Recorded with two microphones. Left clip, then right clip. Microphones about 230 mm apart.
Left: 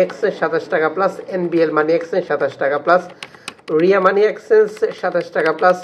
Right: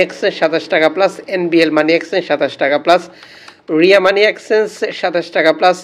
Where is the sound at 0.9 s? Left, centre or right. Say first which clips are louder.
Right 4 dB; right.